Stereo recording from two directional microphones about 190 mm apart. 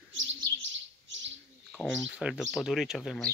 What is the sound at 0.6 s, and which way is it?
Bird, 75° right (ahead or behind).